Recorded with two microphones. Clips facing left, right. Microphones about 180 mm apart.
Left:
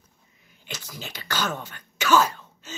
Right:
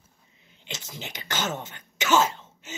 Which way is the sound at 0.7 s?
20° right (ahead or behind).